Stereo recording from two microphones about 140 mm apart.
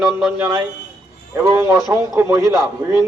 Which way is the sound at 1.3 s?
15° right (ahead or behind).